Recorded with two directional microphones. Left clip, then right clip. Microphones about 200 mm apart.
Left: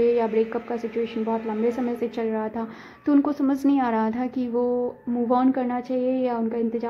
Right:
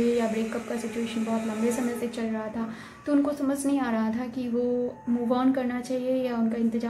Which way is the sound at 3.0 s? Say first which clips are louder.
Left 4 dB; 45° left (ahead or behind).